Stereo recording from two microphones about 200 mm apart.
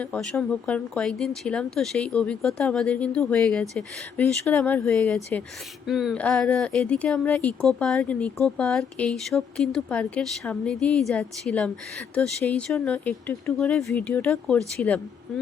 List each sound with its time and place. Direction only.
0.0 s speech: 5° left (ahead or behind)